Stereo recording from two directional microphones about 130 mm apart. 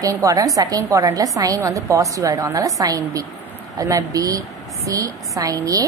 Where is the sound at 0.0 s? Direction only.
25° right (ahead or behind).